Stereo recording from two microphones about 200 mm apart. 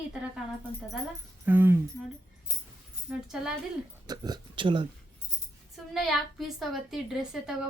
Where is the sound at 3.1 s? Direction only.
5° right (ahead or behind).